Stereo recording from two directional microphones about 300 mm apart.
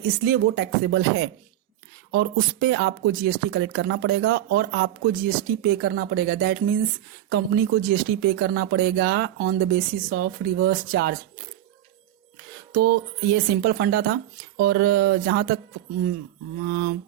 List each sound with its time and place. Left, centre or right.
0.0 s speech: right
12.7 s speech: right
16.6 s speech: right